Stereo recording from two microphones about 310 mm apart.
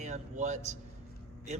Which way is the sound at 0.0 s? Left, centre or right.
Right.